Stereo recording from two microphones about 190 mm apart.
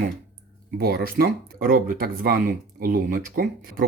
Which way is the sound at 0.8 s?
55° right (ahead or behind).